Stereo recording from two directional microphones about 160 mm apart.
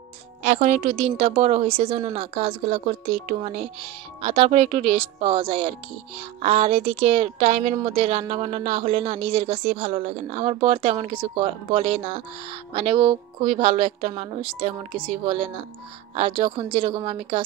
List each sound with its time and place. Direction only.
0.4 s a woman's voice: 45° right (ahead or behind)